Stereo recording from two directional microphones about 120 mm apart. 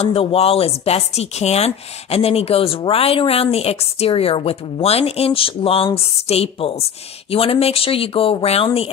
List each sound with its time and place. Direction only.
0.0 s speech: 50° left (ahead or behind)